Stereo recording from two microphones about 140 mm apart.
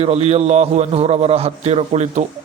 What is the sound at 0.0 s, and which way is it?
A man's voice, 50° right (ahead or behind).